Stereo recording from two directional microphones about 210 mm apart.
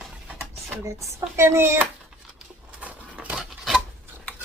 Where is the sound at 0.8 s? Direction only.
15° right (ahead or behind).